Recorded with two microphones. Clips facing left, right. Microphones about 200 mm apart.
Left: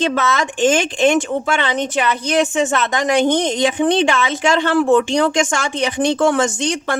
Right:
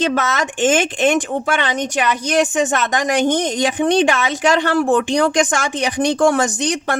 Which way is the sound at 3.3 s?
45° right (ahead or behind).